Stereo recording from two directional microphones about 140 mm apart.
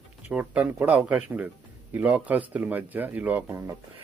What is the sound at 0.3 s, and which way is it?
Speech, 10° right (ahead or behind).